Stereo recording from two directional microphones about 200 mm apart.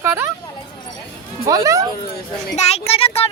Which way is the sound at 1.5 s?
15° right (ahead or behind).